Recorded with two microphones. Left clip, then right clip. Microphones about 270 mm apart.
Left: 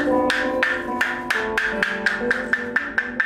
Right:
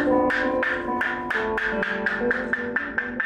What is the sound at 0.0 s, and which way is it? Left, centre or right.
Music, right.